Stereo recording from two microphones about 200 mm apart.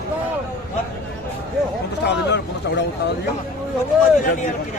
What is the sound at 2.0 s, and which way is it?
Speech, 60° left (ahead or behind).